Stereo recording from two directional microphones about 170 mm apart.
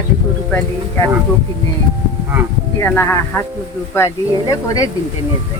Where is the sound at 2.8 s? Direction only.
15° left (ahead or behind).